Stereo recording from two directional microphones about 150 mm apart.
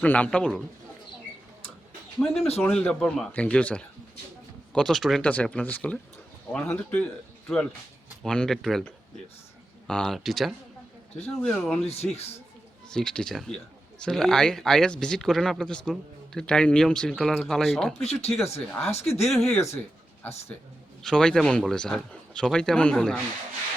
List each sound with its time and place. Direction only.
0.0 s speech: 10° left (ahead or behind)
2.1 s speech: centre (ahead or behind)
11.9 s speech: 45° left (ahead or behind)
12.9 s speech: 5° left (ahead or behind)
18.0 s speech: 45° left (ahead or behind)
19.3 s speech: centre (ahead or behind)
19.5 s speech: 15° left (ahead or behind)
21.0 s speech: 5° left (ahead or behind)